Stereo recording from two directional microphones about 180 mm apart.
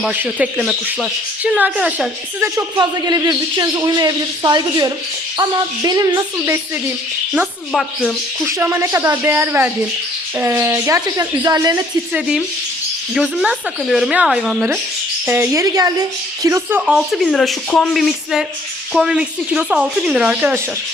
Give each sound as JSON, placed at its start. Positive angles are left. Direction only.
{"t": 0.0, "sound": "speech", "side_deg": -10}
{"t": 2.7, "sound": "speech", "side_deg": -25}
{"t": 7.7, "sound": "speech", "side_deg": 5}
{"t": 8.4, "sound": "speech", "side_deg": -15}
{"t": 13.1, "sound": "speech", "side_deg": -5}